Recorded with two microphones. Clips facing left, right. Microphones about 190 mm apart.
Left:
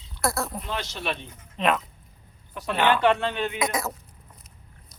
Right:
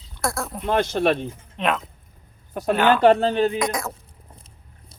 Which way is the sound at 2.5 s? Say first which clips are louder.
Right 4 dB; 45° right (ahead or behind).